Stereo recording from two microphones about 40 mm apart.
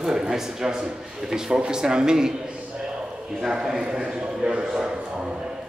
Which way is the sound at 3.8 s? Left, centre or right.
Right.